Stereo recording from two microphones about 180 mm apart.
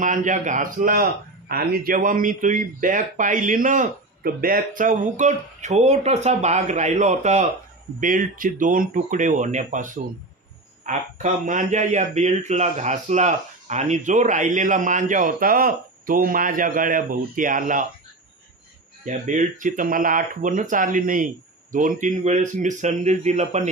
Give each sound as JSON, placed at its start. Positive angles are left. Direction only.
{"t": 0.0, "sound": "speech", "side_deg": -45}
{"t": 19.0, "sound": "speech", "side_deg": -45}